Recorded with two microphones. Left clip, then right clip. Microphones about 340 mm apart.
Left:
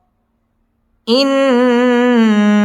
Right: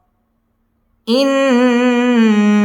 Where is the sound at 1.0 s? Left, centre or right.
Centre.